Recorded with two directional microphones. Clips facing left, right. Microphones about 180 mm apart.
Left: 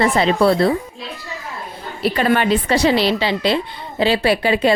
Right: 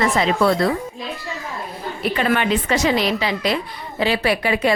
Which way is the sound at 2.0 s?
35° left (ahead or behind).